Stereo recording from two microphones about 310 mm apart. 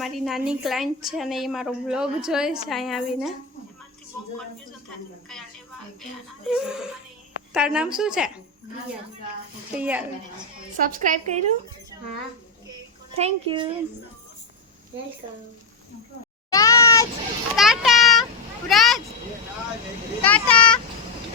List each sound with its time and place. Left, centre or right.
0.0 s a woman's voice: centre
5.3 s a woman's voice: centre
9.7 s a woman's voice: centre
10.8 s a woman's voice: right
13.1 s a child's voice: centre
16.5 s meow: centre
17.6 s a sound: centre
18.7 s speech: centre
20.2 s a woman's voice: centre